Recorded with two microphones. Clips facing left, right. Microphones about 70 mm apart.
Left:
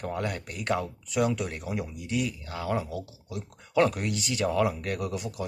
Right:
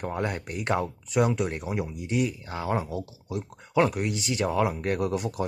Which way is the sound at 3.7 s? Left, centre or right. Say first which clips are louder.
Right 1 dB; centre.